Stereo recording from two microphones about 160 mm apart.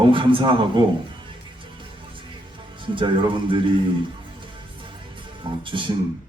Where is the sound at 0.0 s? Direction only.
30° right (ahead or behind).